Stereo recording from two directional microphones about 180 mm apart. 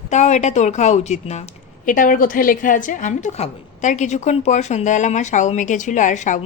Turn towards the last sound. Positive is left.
turn(degrees=45)  # may be behind; listen again after turning